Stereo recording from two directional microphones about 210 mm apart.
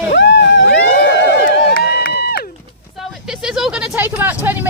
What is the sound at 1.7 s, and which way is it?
Run, 45° left (ahead or behind).